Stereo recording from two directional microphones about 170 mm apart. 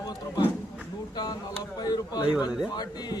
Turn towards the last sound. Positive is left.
turn(degrees=25)  # may be behind; listen again after turning